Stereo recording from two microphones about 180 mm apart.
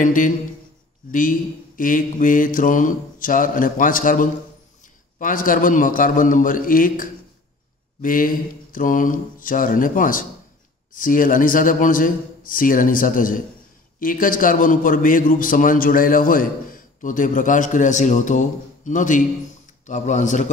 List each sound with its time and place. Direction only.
0.0 s a man's voice: 50° left (ahead or behind)